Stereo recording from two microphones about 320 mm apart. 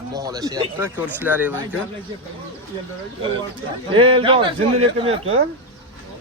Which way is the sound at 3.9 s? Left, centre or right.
Centre.